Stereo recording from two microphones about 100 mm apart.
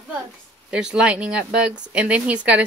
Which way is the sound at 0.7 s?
10° right (ahead or behind).